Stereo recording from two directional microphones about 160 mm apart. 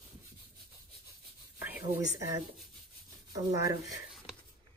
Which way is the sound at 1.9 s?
20° right (ahead or behind).